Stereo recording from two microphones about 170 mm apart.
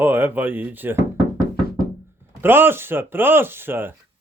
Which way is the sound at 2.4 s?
15° right (ahead or behind).